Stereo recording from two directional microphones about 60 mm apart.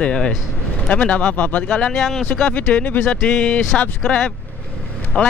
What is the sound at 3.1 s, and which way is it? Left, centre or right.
Speech, centre.